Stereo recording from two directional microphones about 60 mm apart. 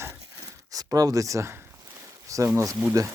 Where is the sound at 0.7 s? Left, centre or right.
Right.